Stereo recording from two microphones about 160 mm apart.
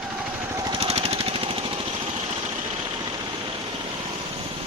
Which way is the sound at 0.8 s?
40° right (ahead or behind).